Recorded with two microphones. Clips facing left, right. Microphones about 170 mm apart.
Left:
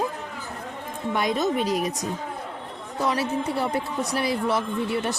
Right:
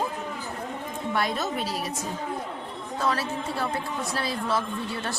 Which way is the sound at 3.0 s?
20° left (ahead or behind).